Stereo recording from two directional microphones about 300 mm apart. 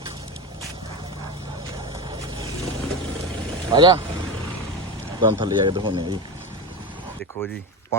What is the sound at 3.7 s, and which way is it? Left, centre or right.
Speech, centre.